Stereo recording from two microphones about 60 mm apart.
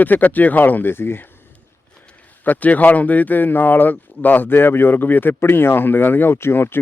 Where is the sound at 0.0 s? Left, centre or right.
Left.